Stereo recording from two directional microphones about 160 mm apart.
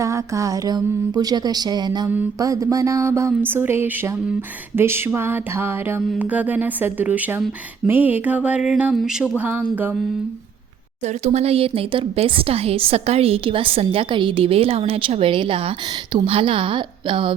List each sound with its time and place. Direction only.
0.0 s speech: 20° right (ahead or behind)
2.0 s mantra: 15° right (ahead or behind)
11.0 s speech: 45° right (ahead or behind)